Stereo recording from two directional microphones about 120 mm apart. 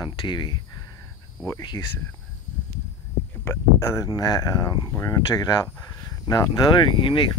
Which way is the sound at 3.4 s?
25° left (ahead or behind).